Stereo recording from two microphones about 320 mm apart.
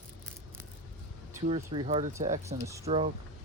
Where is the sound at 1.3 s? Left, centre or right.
Centre.